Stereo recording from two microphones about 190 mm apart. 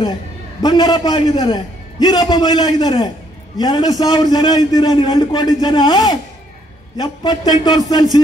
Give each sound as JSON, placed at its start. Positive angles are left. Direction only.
{"t": 0.6, "sound": "a man's voice", "side_deg": 20}